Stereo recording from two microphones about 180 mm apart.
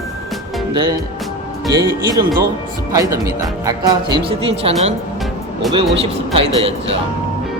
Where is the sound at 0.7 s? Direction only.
25° right (ahead or behind).